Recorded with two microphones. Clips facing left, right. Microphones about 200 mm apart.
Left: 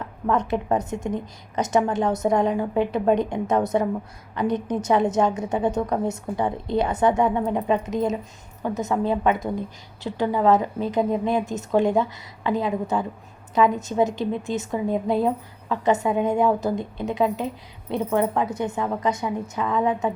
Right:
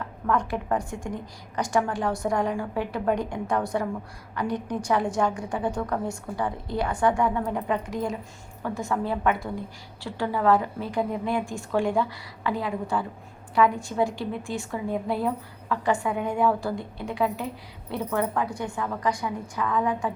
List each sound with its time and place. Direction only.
0.3 s a woman's voice: 20° left (ahead or behind)